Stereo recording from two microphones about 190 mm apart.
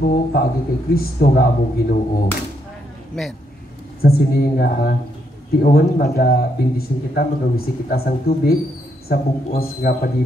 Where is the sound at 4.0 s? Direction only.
50° left (ahead or behind).